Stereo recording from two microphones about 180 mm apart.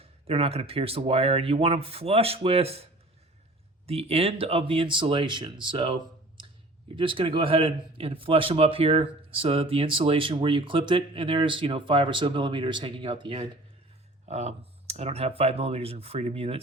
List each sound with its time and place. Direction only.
0.0 s speech: 35° right (ahead or behind)
3.8 s speech: 35° right (ahead or behind)